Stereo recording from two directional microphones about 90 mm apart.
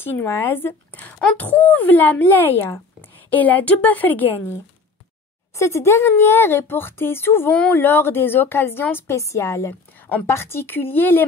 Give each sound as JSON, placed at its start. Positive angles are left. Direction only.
{"t": 0.0, "sound": "speech", "side_deg": 25}
{"t": 5.6, "sound": "speech", "side_deg": 30}